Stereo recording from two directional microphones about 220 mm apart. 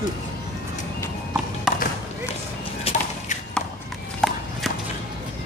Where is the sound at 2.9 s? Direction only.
25° left (ahead or behind).